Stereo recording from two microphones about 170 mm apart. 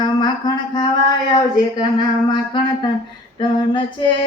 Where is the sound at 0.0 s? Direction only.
25° left (ahead or behind).